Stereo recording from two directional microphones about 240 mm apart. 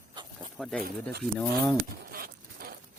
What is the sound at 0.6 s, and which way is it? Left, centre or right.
Speech, centre.